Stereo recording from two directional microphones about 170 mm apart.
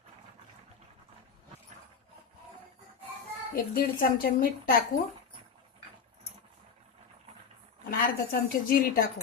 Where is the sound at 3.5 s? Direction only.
55° left (ahead or behind).